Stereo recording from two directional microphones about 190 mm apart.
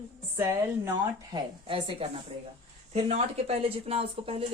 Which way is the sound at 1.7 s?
30° right (ahead or behind).